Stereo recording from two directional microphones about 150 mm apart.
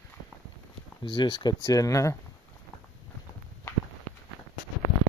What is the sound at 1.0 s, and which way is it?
Speech, 30° left (ahead or behind).